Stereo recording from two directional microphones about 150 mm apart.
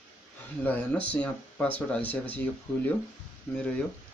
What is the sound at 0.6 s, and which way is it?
Speech, 10° left (ahead or behind).